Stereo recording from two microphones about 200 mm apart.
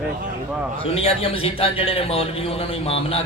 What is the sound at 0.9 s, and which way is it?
A man's voice, 30° left (ahead or behind).